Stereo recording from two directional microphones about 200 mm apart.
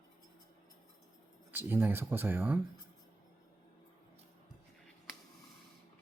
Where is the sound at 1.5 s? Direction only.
10° right (ahead or behind).